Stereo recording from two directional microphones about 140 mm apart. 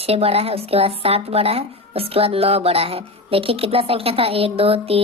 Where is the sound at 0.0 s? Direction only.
45° right (ahead or behind).